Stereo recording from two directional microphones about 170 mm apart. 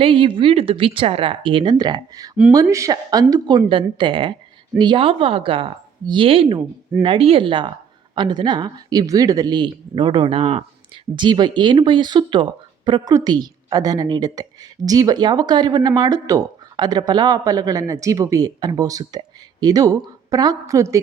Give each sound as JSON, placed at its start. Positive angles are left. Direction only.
{"t": 0.0, "sound": "speech", "side_deg": -30}